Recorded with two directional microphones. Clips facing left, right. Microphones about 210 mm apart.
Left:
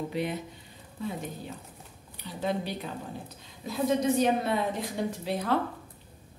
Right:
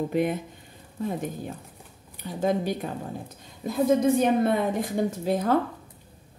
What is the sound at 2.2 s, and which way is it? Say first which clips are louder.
A woman's voice: right 6 dB; 45° right (ahead or behind).